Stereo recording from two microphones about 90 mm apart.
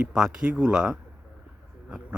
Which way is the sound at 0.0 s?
5° right (ahead or behind).